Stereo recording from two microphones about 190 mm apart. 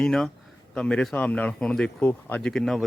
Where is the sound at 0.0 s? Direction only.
5° left (ahead or behind).